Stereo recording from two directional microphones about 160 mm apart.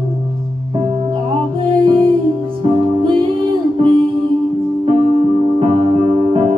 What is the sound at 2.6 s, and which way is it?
Music, 30° right (ahead or behind).